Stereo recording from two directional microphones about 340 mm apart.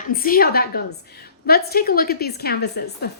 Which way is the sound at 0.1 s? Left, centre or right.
Left.